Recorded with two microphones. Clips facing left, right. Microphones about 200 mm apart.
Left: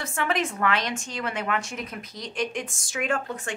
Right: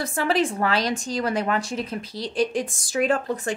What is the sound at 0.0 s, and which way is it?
A woman's voice, 35° right (ahead or behind).